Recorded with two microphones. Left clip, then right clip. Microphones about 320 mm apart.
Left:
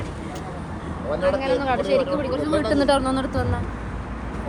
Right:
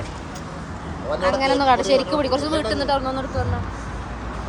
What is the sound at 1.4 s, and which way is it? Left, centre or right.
Speech, right.